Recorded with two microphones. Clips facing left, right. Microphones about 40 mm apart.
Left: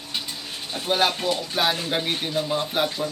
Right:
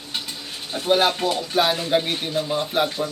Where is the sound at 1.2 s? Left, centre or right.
Centre.